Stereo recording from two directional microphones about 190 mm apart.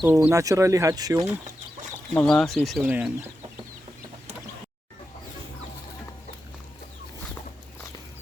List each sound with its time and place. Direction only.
0.0 s speech: 15° right (ahead or behind)
2.1 s speech: 5° left (ahead or behind)